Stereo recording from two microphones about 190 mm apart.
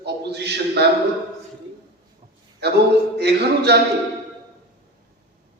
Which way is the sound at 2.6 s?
60° right (ahead or behind).